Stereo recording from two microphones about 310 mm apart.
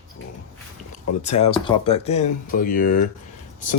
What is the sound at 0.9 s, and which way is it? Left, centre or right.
Speech, left.